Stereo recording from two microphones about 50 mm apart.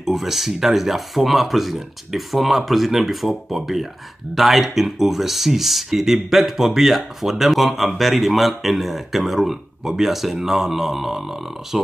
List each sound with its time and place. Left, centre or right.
0.0 s speech: centre